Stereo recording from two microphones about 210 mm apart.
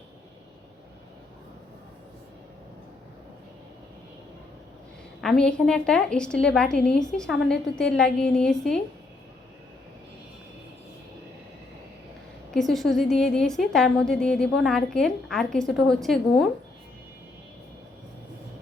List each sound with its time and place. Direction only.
5.2 s a woman's voice: 5° left (ahead or behind)
12.5 s a woman's voice: centre (ahead or behind)